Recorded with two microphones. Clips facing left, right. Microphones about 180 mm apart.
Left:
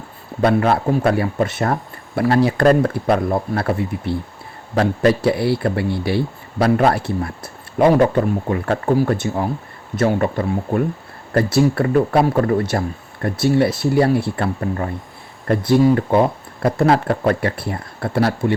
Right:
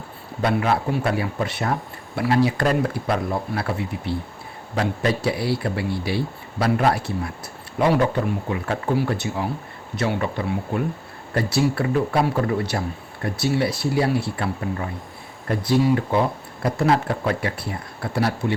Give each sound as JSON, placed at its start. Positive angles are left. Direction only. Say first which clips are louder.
{"t": 0.4, "sound": "a man's voice", "louder": "left 5 dB", "side_deg": 45}